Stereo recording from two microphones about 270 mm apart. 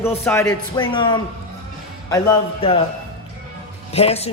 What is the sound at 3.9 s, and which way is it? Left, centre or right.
Speech, left.